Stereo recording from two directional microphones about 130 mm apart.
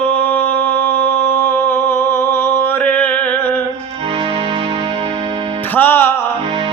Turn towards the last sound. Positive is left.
turn(degrees=15)  # may be behind; listen again after turning